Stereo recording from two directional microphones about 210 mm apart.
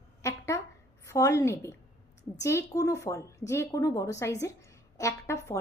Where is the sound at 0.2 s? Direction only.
15° left (ahead or behind).